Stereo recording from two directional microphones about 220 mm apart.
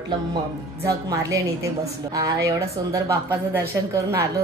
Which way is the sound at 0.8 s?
15° right (ahead or behind).